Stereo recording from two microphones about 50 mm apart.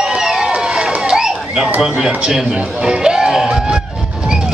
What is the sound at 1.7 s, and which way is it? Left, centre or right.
Speech, centre.